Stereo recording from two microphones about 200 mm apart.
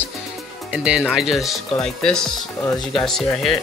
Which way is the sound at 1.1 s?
Centre (ahead or behind).